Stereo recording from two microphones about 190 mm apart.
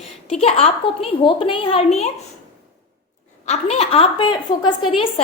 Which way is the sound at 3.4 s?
35° left (ahead or behind).